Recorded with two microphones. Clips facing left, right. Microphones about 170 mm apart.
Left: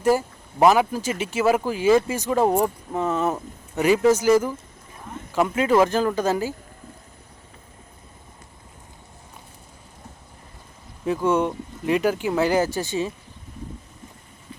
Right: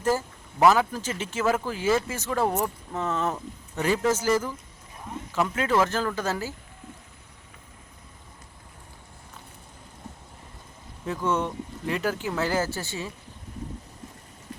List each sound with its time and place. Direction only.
0.0 s speech: 15° left (ahead or behind)
2.5 s speech: 30° left (ahead or behind)
2.9 s speech: 10° left (ahead or behind)
11.0 s speech: 15° left (ahead or behind)